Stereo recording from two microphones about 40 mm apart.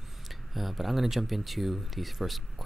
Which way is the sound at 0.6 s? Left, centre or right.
Centre.